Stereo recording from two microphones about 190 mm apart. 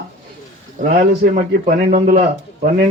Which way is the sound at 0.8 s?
45° right (ahead or behind).